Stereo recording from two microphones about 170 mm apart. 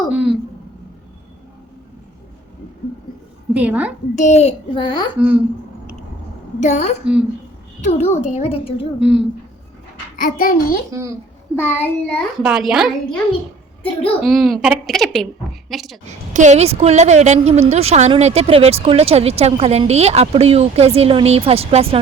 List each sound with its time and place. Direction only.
0.1 s a sound: 5° right (ahead or behind)
3.5 s a woman's voice: 10° right (ahead or behind)
4.1 s a child's voice: 45° left (ahead or behind); by 5.0 s 25° left (ahead or behind)
6.6 s a woman's voice: 45° left (ahead or behind)
9.0 s speech: 5° right (ahead or behind)
10.2 s a child's voice: 55° left (ahead or behind)
11.5 s child singing: 10° left (ahead or behind)
12.4 s speech: 5° right (ahead or behind)
16.3 s a woman's voice: 45° right (ahead or behind)